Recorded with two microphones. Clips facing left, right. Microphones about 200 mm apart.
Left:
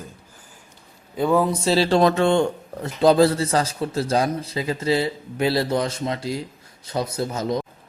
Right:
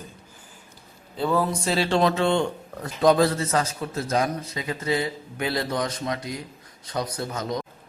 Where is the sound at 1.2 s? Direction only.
15° left (ahead or behind); by 2.1 s 40° left (ahead or behind).